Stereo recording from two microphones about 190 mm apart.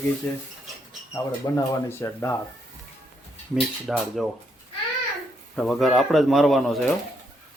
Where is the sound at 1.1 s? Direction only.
10° left (ahead or behind).